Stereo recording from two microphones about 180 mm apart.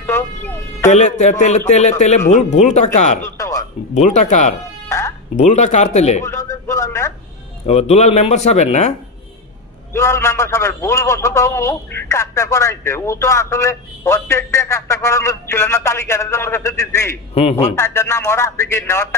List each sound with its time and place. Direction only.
0.8 s speech: 40° left (ahead or behind)
3.2 s music: 15° left (ahead or behind)
3.9 s speech: 40° left (ahead or behind)
4.8 s music: 15° left (ahead or behind)
5.3 s speech: 40° left (ahead or behind)
6.2 s a sound: 15° left (ahead or behind)
7.6 s speech: 35° left (ahead or behind)
9.9 s a man's voice: 15° left (ahead or behind)
17.3 s speech: 35° left (ahead or behind)
17.7 s a man's voice: 15° left (ahead or behind)